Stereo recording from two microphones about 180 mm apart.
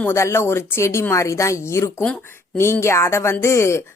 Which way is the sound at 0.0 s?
15° left (ahead or behind).